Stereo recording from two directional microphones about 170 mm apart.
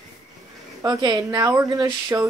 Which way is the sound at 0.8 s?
20° right (ahead or behind).